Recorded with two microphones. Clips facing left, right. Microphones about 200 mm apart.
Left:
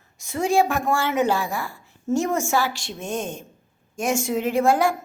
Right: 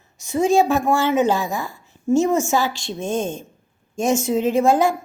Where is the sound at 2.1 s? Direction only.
15° right (ahead or behind).